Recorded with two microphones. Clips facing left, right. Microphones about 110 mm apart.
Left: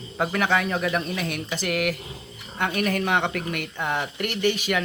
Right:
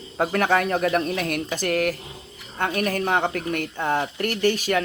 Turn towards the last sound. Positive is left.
turn(degrees=-40)  # may be behind; listen again after turning